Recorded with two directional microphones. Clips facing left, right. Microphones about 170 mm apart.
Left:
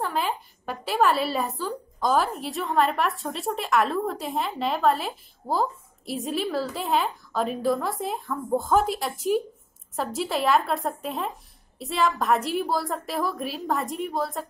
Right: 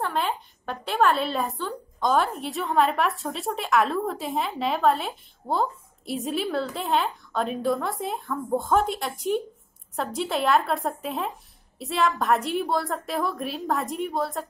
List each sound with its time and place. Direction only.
0.0 s a woman's voice: centre (ahead or behind)